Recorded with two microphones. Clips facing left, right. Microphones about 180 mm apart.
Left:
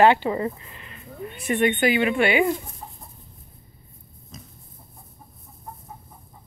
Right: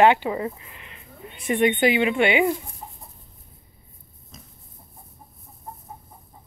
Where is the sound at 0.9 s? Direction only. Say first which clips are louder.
Left 9 dB; 20° right (ahead or behind).